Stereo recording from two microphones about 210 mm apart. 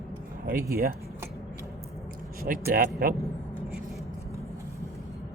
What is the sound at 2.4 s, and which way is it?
Speech, 45° right (ahead or behind).